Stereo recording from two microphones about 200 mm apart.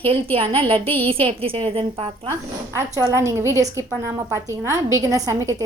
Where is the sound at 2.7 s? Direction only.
15° right (ahead or behind).